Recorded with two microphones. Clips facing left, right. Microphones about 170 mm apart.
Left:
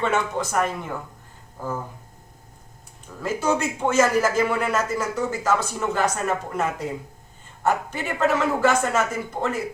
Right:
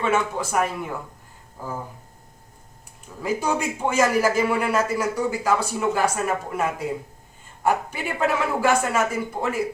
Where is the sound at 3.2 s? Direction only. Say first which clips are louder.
Left 1 dB; 15° right (ahead or behind).